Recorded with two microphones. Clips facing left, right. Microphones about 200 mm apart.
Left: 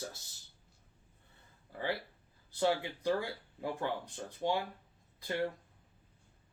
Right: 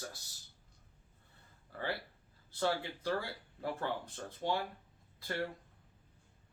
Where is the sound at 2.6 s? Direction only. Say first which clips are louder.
Left 3 dB; 15° left (ahead or behind).